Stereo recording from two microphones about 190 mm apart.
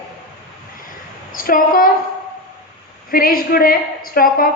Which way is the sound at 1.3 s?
45° left (ahead or behind).